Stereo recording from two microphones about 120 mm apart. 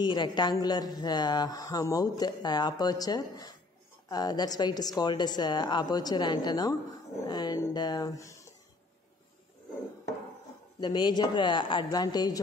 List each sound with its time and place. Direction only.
0.0 s speech: 35° left (ahead or behind)
10.8 s speech: 35° left (ahead or behind)